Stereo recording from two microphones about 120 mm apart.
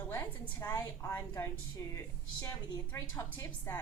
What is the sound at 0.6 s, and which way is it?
A woman's voice, 25° left (ahead or behind).